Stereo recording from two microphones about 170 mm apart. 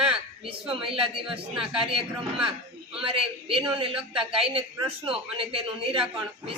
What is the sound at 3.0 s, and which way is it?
A woman's voice, 35° right (ahead or behind).